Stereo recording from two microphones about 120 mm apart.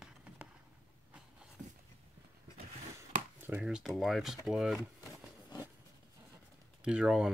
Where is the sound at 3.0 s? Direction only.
20° right (ahead or behind).